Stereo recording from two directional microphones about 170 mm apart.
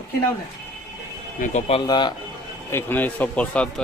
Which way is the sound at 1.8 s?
25° left (ahead or behind).